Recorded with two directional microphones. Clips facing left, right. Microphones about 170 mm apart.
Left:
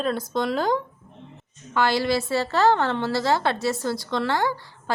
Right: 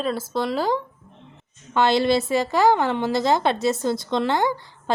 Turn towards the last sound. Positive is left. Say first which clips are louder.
# right 3 dB
turn(degrees=-20)  # may be behind; listen again after turning